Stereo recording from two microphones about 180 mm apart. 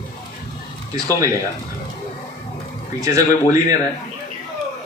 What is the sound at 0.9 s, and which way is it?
Speech, 20° right (ahead or behind).